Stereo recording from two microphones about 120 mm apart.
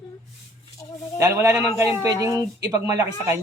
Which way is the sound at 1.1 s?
25° right (ahead or behind).